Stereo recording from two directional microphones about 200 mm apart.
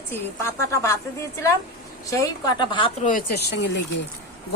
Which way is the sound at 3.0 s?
40° left (ahead or behind).